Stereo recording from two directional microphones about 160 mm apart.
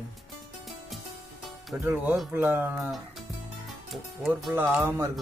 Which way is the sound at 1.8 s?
10° right (ahead or behind).